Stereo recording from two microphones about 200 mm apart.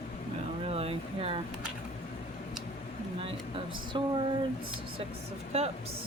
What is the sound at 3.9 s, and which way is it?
Speech, 25° right (ahead or behind).